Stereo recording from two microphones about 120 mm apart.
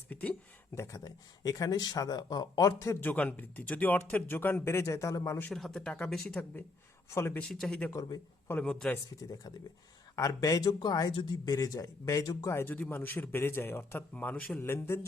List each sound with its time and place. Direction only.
0.1 s a man's voice: 10° left (ahead or behind)
0.8 s speech: 25° left (ahead or behind)
5.5 s speech: 5° left (ahead or behind)
7.1 s speech: 20° left (ahead or behind)
7.3 s speech: 5° left (ahead or behind)
7.9 s speech: 25° left (ahead or behind)
8.6 s speech: 5° left (ahead or behind)
10.2 s a man's voice: 30° left (ahead or behind)